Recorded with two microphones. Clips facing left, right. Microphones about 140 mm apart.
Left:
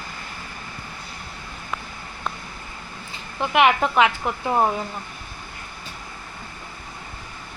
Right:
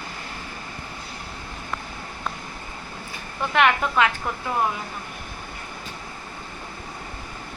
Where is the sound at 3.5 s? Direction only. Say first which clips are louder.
Left 2 dB; 20° left (ahead or behind).